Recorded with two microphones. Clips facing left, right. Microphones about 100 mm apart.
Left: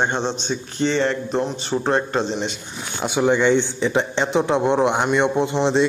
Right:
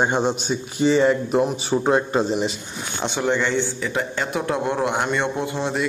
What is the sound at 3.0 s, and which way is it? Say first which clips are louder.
A man's voice: left 4 dB; 10° left (ahead or behind).